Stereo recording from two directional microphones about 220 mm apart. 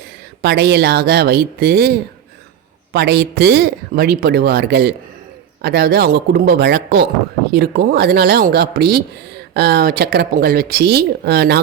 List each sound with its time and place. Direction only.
0.0 s speech: 50° right (ahead or behind)
2.9 s speech: 50° right (ahead or behind)